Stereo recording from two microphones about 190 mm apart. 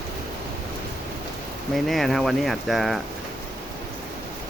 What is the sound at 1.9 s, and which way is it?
Speech, centre (ahead or behind).